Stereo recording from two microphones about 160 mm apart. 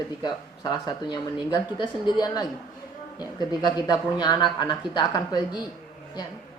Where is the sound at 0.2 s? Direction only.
25° left (ahead or behind).